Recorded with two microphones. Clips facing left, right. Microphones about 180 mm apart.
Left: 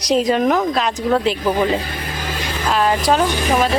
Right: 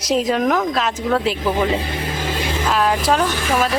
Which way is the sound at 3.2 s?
15° left (ahead or behind).